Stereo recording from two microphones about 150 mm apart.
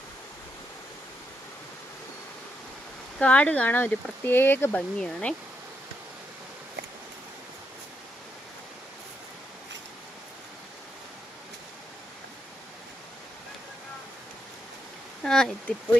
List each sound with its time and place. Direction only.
3.2 s speech: 10° left (ahead or behind)
15.2 s speech: 5° left (ahead or behind)